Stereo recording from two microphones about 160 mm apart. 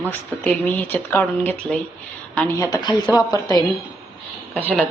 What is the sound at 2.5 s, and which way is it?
Speech, 20° left (ahead or behind).